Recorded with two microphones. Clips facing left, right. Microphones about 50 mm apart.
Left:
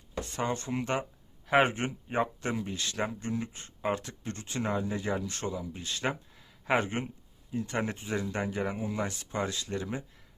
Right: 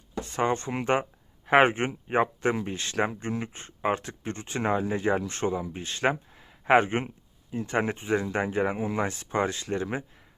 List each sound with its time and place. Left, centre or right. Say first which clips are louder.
0.2 s speech: right 6 dB; right